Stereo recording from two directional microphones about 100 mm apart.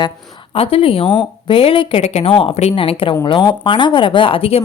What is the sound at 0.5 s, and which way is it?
A woman's voice, 75° left (ahead or behind).